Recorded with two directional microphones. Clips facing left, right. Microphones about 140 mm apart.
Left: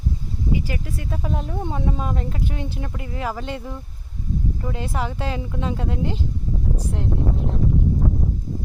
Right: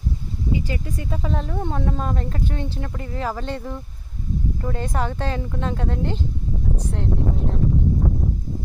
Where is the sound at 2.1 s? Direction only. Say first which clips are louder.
Right 1 dB; 40° right (ahead or behind).